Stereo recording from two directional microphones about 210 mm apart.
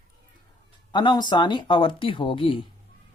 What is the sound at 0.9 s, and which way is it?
Speech, 20° left (ahead or behind).